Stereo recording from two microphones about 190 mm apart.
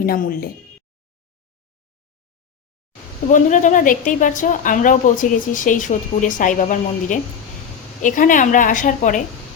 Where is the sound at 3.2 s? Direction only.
40° left (ahead or behind).